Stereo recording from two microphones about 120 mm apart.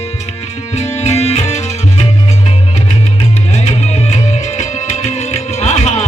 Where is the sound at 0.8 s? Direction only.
65° left (ahead or behind).